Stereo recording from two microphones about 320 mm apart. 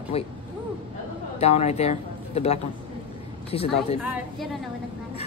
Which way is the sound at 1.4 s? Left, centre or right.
Centre.